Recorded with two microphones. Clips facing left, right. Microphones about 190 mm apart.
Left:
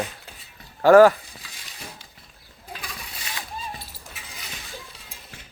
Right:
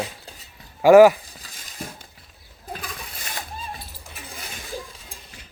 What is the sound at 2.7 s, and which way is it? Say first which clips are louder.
Toilet flush: right 3 dB; 45° right (ahead or behind).